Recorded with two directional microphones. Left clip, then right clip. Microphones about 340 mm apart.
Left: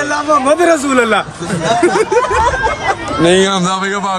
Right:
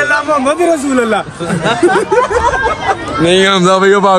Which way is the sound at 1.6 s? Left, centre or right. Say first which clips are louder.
Right 1 dB; centre.